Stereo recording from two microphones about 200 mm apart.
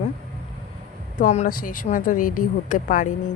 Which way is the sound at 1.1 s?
40° left (ahead or behind).